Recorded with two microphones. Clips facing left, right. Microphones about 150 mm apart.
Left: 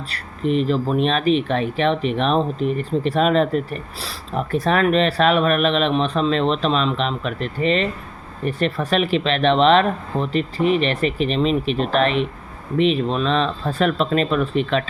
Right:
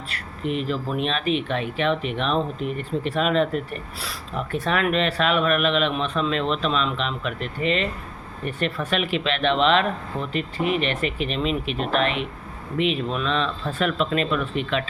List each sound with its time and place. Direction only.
0.1 s speech: 35° left (ahead or behind)